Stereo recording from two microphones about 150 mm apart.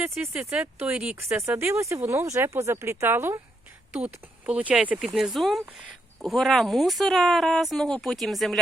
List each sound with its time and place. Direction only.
0.0 s speech: 5° right (ahead or behind)